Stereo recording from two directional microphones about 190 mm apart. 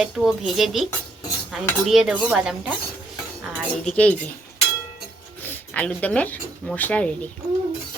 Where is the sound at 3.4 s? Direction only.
5° left (ahead or behind).